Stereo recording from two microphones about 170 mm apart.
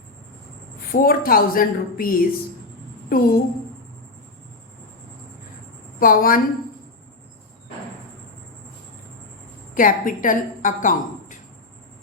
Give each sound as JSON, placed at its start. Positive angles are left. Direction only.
{"t": 0.9, "sound": "a woman's voice", "side_deg": 60}
{"t": 6.0, "sound": "a woman's voice", "side_deg": 55}
{"t": 9.7, "sound": "a woman's voice", "side_deg": 55}